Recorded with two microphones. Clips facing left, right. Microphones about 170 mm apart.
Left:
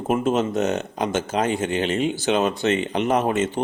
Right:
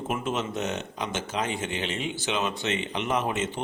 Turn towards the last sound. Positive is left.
turn(degrees=40)  # may be behind; listen again after turning